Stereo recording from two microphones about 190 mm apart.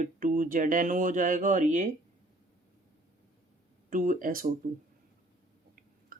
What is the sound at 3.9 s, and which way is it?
Speech, 45° right (ahead or behind).